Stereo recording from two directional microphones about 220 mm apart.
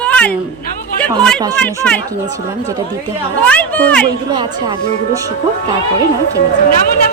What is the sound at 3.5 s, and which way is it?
Speech, 5° left (ahead or behind).